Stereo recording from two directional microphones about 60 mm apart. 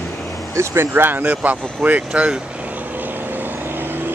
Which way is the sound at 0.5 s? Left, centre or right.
Right.